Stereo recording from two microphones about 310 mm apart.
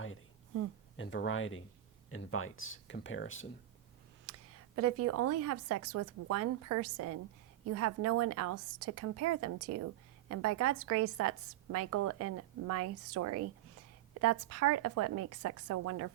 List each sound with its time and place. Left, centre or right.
0.9 s speech: left
4.3 s a sound: right
4.9 s a woman's voice: right